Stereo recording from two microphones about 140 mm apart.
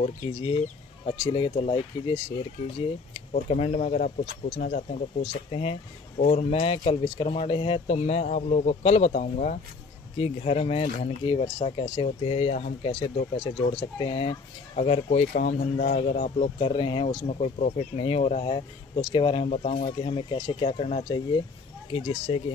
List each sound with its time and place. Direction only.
0.0 s speech: 40° left (ahead or behind)
3.4 s speech: 55° left (ahead or behind)
4.6 s speech: 75° left (ahead or behind)
5.2 s speech: 45° left (ahead or behind)
10.1 s speech: 45° left (ahead or behind)
14.8 s speech: 55° left (ahead or behind); by 19.4 s 40° left (ahead or behind)
19.4 s speech: 50° left (ahead or behind)